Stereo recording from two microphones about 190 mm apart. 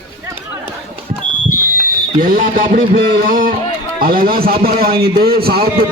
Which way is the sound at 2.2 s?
50° right (ahead or behind).